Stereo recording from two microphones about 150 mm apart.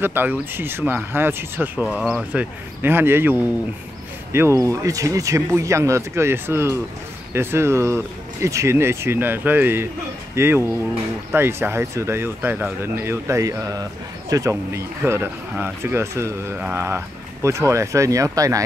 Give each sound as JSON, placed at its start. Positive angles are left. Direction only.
{"t": 0.0, "sound": "speech", "side_deg": -15}
{"t": 2.8, "sound": "speech", "side_deg": -15}